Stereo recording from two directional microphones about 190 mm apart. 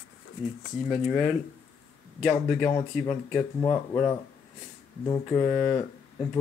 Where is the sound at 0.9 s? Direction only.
5° right (ahead or behind).